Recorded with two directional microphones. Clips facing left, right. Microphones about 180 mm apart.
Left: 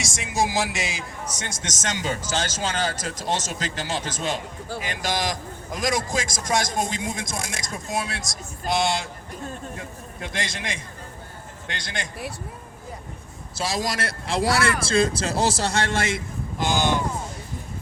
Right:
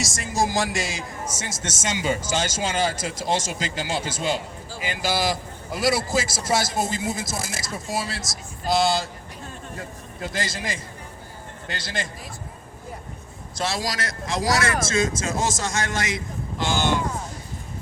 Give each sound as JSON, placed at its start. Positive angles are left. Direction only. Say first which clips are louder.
{"t": 0.0, "sound": "a man's voice", "louder": "right 1 dB", "side_deg": 0}
{"t": 13.6, "sound": "speech", "louder": "even", "side_deg": 15}
{"t": 13.8, "sound": "speech", "louder": "left 1 dB", "side_deg": 30}
{"t": 16.6, "sound": "speech", "louder": "left 1 dB", "side_deg": 15}